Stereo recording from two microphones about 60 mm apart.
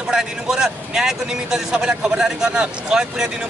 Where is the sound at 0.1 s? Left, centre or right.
Centre.